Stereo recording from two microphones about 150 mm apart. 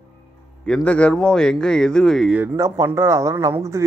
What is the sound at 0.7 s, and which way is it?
Speech, 10° left (ahead or behind).